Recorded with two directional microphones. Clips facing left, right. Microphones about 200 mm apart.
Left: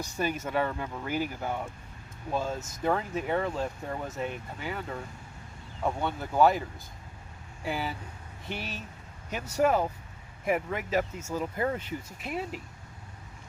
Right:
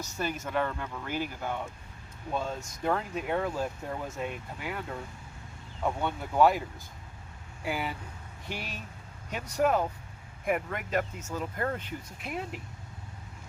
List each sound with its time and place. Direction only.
0.0 s speech: 10° left (ahead or behind)